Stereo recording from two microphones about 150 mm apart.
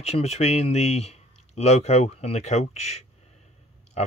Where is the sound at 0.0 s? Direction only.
45° left (ahead or behind).